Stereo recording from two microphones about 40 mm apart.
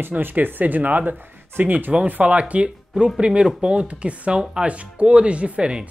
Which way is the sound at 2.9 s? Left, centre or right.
Right.